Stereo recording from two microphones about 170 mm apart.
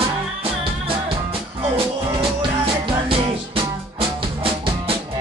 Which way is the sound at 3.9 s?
35° right (ahead or behind).